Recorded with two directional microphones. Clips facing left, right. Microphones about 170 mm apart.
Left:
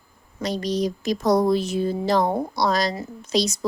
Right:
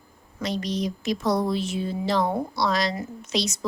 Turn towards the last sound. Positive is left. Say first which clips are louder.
# left 4 dB
turn(degrees=35)  # may be behind; listen again after turning